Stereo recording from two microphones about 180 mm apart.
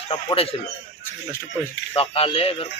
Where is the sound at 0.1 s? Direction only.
30° left (ahead or behind).